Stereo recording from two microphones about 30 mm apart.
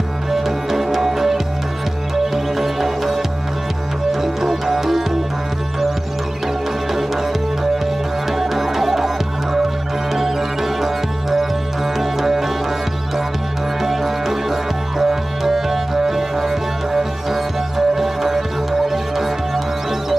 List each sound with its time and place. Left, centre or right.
0.3 s music: centre
8.3 s music: centre
10.8 s music: centre
13.8 s music: centre